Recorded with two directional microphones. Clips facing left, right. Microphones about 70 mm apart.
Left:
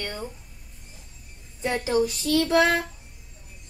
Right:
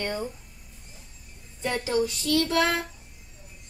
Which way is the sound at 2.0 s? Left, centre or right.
Left.